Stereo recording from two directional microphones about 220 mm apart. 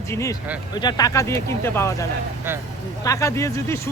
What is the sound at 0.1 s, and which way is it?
Speech, 15° left (ahead or behind).